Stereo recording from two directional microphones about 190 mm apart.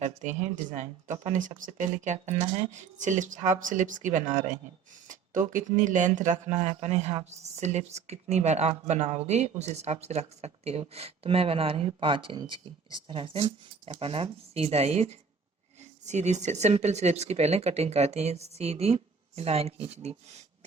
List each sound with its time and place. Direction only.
0.0 s speech: 40° right (ahead or behind)